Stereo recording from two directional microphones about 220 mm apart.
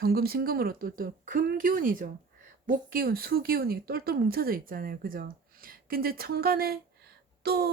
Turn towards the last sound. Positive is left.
turn(degrees=-45)  # may be behind; listen again after turning